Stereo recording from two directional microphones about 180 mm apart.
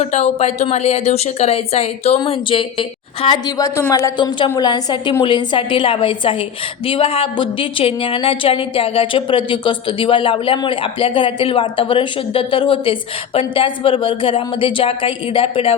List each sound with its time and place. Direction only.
0.0 s a woman's voice: 35° left (ahead or behind)